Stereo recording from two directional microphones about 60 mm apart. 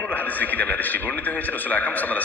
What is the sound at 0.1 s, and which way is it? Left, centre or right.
A man's voice, left.